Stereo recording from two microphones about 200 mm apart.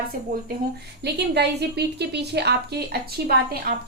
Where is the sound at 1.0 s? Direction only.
55° right (ahead or behind).